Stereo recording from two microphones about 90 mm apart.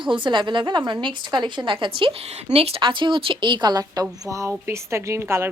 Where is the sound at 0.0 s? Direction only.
65° right (ahead or behind); by 4.0 s 50° right (ahead or behind).